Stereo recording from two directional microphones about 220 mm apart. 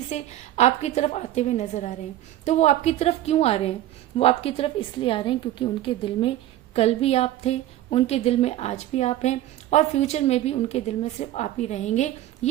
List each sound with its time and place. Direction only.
0.1 s a woman's voice: 30° left (ahead or behind)